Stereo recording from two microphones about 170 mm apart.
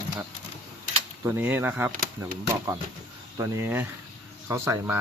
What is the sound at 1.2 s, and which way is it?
Speech, 10° right (ahead or behind).